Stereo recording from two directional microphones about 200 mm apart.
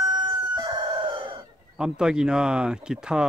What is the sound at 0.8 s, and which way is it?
Chicken, 25° right (ahead or behind).